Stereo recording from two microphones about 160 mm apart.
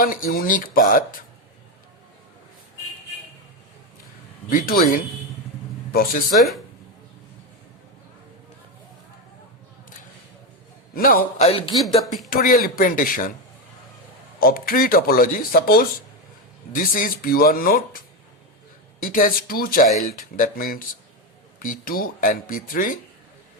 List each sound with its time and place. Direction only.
0.0 s speech: 60° left (ahead or behind)
4.4 s speech: 60° left (ahead or behind)
6.3 s speech: centre (ahead or behind)
10.9 s speech: 65° left (ahead or behind)
11.4 s speech: 35° left (ahead or behind)
11.8 s speech: centre (ahead or behind)
12.3 s speech: 65° left (ahead or behind)
14.3 s speech: 65° left (ahead or behind)
19.1 s speech: 65° left (ahead or behind)